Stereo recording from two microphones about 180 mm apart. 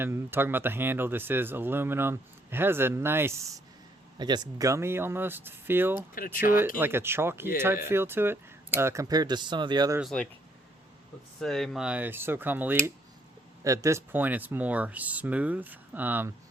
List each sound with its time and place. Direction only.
0.0 s speech: 15° right (ahead or behind)
6.1 s speech: 50° left (ahead or behind)
6.7 s speech: 10° right (ahead or behind)
10.0 s speech: 5° left (ahead or behind)
11.3 s speech: centre (ahead or behind)